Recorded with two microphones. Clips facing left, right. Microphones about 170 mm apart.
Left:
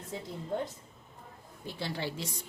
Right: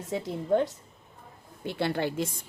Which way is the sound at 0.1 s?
80° right.